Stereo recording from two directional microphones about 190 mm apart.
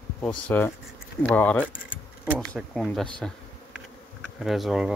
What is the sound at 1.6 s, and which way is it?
Keys jangling, 5° right (ahead or behind).